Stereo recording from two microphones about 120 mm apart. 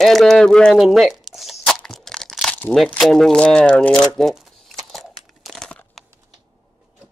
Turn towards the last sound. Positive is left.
turn(degrees=5)  # may be behind; listen again after turning